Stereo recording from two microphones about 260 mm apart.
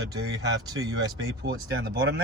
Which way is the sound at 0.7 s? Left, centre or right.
Centre.